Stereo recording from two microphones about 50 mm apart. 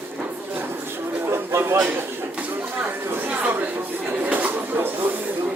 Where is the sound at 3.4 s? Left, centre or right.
Right.